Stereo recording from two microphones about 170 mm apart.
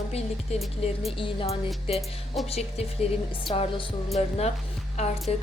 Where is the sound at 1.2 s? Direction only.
35° left (ahead or behind).